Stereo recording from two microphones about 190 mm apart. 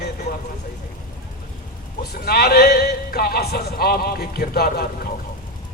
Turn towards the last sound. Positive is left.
turn(degrees=50)  # may be behind; listen again after turning